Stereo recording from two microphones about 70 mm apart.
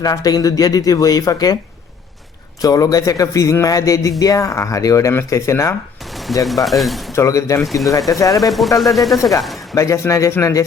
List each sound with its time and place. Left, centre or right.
0.0 s speech: left
2.6 s a man's voice: left
6.3 s speech: centre
7.1 s a man's voice: left
7.6 s speech: centre
8.1 s a man's voice: left
8.4 s speech: centre
9.7 s a man's voice: left